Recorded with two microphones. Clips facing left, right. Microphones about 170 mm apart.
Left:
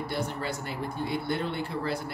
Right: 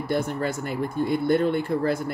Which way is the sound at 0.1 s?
50° right (ahead or behind).